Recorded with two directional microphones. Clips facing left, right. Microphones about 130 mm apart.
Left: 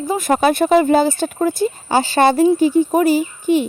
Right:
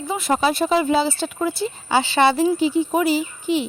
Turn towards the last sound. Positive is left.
turn(degrees=45)  # may be behind; listen again after turning